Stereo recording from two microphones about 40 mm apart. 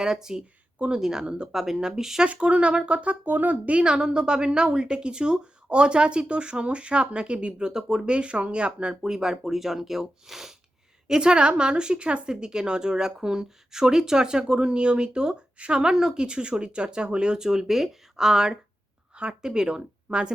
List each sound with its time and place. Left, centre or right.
0.0 s speech: centre
2.2 s speech: right
3.7 s a woman's voice: right
7.7 s speech: centre
8.1 s a woman's voice: right
9.0 s speech: centre
11.1 s a woman's voice: right
19.1 s speech: right